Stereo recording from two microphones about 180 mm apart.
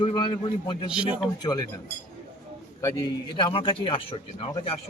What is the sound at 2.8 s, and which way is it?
A man's voice, 20° left (ahead or behind).